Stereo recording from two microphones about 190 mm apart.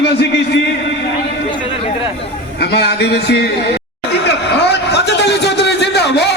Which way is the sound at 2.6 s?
60° left (ahead or behind).